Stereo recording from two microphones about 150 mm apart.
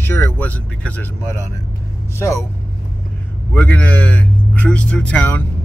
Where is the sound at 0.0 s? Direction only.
15° left (ahead or behind).